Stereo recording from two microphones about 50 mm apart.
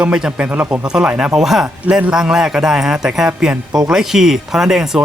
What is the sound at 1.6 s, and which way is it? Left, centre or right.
A man's voice, right.